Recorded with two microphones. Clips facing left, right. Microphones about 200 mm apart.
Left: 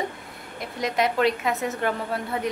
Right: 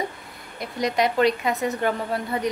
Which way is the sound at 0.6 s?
Centre (ahead or behind).